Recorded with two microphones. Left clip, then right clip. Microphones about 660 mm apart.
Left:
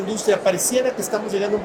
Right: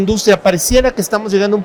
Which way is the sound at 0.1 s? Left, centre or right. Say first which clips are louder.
Right 7 dB; right.